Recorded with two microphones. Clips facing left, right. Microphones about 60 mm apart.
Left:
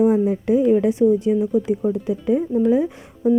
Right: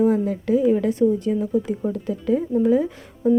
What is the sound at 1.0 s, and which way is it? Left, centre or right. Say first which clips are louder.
Speech: left 3 dB; centre.